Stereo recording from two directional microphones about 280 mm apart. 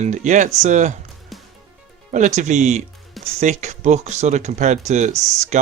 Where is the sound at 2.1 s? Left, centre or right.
Right.